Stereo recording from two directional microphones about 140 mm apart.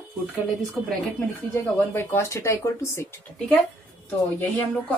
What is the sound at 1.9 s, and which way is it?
Speech, 15° left (ahead or behind).